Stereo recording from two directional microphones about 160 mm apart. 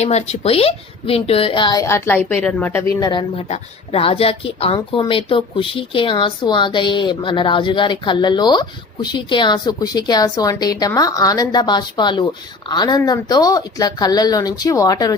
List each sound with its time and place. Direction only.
0.0 s a woman's voice: 45° left (ahead or behind); by 3.0 s 15° left (ahead or behind)
3.0 s a woman's voice: 30° left (ahead or behind)